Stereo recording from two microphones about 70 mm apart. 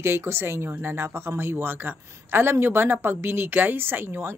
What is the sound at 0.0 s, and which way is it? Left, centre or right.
Speech, right.